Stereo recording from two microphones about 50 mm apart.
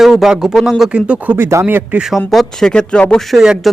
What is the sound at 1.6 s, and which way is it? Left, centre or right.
Speech, right.